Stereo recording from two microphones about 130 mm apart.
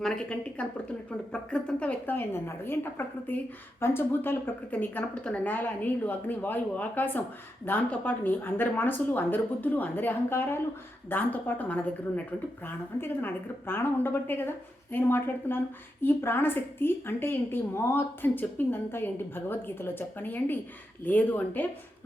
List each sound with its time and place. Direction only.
0.0 s a woman's voice: 5° left (ahead or behind)